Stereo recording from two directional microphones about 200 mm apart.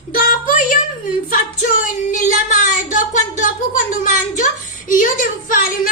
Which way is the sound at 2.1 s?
40° left (ahead or behind).